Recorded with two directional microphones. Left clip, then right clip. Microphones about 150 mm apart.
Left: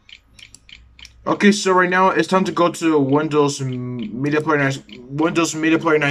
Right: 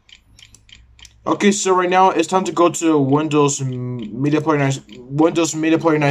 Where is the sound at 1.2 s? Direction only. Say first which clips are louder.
Even; 20° right (ahead or behind).